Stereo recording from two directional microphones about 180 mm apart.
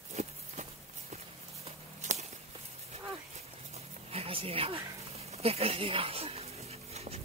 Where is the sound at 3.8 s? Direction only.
30° right (ahead or behind).